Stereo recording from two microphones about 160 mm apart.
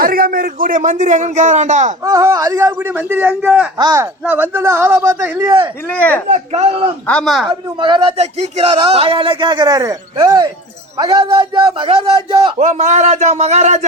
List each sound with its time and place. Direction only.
0.0 s a man's voice: 65° right (ahead or behind); by 2.0 s 50° right (ahead or behind)
2.0 s a man's voice: 20° right (ahead or behind)
3.8 s a man's voice: 20° right (ahead or behind)
4.2 s a man's voice: 10° right (ahead or behind)
5.9 s speech: 10° left (ahead or behind)
6.2 s speech: 45° right (ahead or behind)
7.1 s speech: centre (ahead or behind)
7.8 s a man's voice: 30° right (ahead or behind)
12.5 s a man's voice: 50° right (ahead or behind)